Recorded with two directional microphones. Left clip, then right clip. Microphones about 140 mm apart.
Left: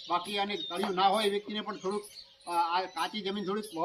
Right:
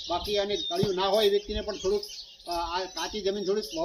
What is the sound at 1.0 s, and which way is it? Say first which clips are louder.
Speech: right 2 dB; 10° left (ahead or behind).